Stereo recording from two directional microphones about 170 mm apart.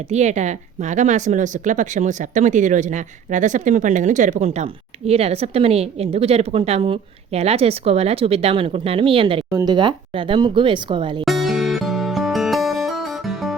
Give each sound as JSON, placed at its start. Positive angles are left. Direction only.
{"t": 0.1, "sound": "speech", "side_deg": -45}
{"t": 9.5, "sound": "speech", "side_deg": -20}
{"t": 11.3, "sound": "music", "side_deg": 0}